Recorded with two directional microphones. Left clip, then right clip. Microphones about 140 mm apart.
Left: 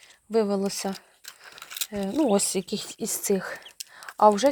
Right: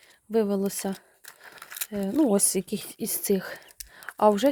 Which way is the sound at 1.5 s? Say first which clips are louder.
Left 4 dB; 50° right (ahead or behind).